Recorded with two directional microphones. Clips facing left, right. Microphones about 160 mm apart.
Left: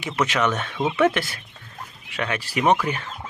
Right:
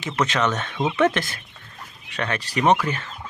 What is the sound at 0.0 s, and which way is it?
Speech, 10° left (ahead or behind).